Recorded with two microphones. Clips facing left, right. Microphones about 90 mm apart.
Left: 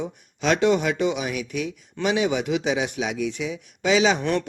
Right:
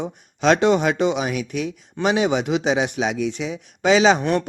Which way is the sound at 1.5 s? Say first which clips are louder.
Right 2 dB; 40° right (ahead or behind).